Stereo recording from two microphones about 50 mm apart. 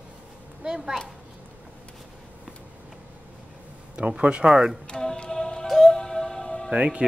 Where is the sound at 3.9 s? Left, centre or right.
Right.